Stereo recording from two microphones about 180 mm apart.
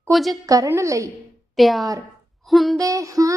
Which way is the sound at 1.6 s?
Centre (ahead or behind).